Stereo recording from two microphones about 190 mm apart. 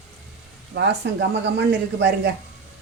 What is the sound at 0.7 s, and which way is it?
Speech, 65° right (ahead or behind).